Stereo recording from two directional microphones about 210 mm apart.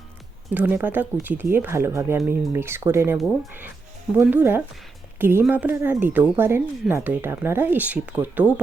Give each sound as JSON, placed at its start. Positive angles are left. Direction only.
{"t": 0.5, "sound": "speech", "side_deg": -10}